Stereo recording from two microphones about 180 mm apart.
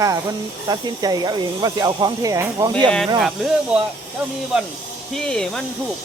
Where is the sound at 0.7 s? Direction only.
20° right (ahead or behind).